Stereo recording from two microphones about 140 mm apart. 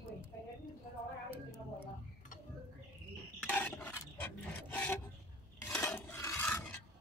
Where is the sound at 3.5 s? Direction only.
10° left (ahead or behind).